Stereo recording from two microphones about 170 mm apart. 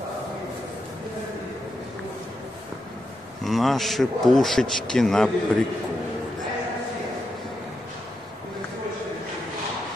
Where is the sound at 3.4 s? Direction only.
Centre (ahead or behind).